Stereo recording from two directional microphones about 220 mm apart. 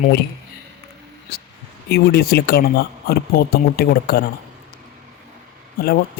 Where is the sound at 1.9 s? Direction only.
45° left (ahead or behind).